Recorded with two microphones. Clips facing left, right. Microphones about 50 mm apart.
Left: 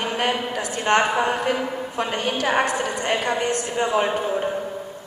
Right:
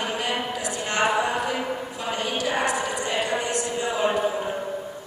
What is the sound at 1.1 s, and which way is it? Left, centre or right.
A woman's voice, left.